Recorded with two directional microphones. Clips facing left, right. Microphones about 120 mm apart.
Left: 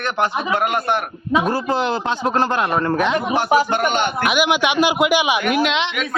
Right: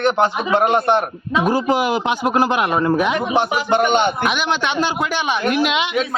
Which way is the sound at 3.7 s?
20° right (ahead or behind).